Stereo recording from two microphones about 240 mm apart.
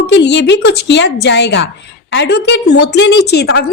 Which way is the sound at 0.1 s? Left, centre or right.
Left.